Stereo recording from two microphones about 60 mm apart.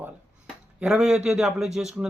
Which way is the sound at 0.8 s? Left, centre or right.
Centre.